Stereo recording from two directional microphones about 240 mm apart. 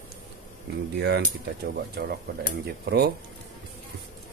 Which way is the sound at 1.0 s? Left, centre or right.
Right.